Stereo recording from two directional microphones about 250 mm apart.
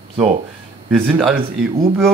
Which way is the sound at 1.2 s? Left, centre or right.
Centre.